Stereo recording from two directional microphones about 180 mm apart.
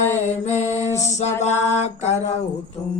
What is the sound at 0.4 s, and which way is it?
Mantra, 40° left (ahead or behind).